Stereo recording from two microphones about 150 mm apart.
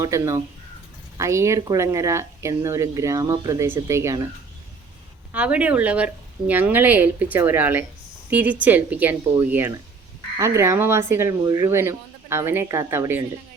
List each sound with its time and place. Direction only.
0.0 s speech: 20° right (ahead or behind)
5.3 s speech: 10° right (ahead or behind)